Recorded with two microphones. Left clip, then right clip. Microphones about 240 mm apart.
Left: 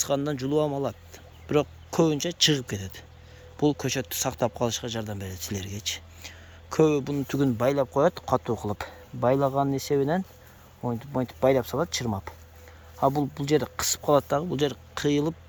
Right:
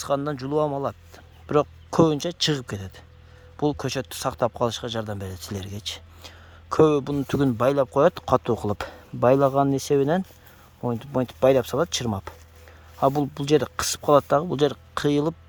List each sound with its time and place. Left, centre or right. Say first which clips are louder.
0.0 s a man's voice: right 1 dB; right